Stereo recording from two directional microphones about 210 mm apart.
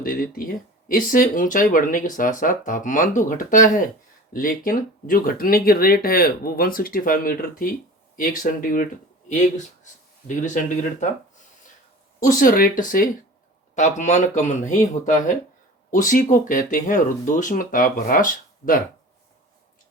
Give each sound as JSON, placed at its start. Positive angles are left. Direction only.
{"t": 0.0, "sound": "speech", "side_deg": 45}
{"t": 10.2, "sound": "speech", "side_deg": 35}
{"t": 12.2, "sound": "speech", "side_deg": 40}